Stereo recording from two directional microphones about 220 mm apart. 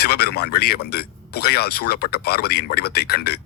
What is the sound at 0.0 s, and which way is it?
A man's voice, 45° left (ahead or behind).